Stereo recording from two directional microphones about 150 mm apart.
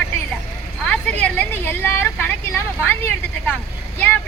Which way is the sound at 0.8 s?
5° left (ahead or behind).